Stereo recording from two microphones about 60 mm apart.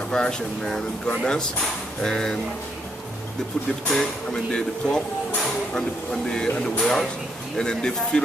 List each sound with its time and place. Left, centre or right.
0.1 s speech: centre
3.9 s speech: centre
6.3 s speech: centre